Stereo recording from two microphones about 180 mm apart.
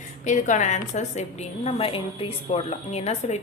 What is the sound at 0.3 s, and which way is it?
A woman's voice, 45° left (ahead or behind).